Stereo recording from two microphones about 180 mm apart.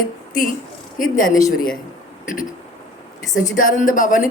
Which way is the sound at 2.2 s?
50° left (ahead or behind).